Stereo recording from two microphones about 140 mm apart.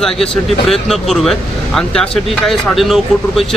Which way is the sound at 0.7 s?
Centre (ahead or behind).